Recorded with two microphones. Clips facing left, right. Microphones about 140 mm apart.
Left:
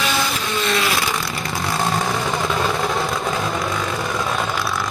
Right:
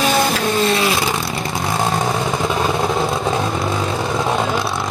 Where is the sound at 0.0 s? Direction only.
50° right (ahead or behind).